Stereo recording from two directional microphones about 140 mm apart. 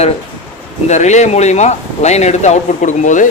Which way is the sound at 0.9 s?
55° left (ahead or behind).